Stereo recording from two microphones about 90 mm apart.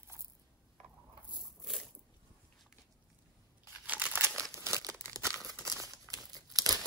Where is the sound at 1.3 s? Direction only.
Centre (ahead or behind).